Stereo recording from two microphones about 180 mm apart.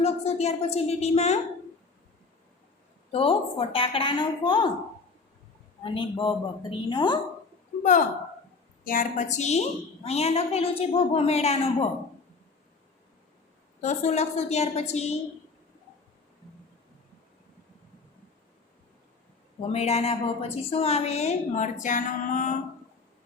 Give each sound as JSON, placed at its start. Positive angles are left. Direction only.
{"t": 0.0, "sound": "a woman's voice", "side_deg": 35}
{"t": 3.1, "sound": "a woman's voice", "side_deg": 30}
{"t": 5.8, "sound": "a woman's voice", "side_deg": 30}
{"t": 7.8, "sound": "a woman's voice", "side_deg": 45}
{"t": 13.8, "sound": "a woman's voice", "side_deg": 40}
{"t": 19.7, "sound": "a woman's voice", "side_deg": 35}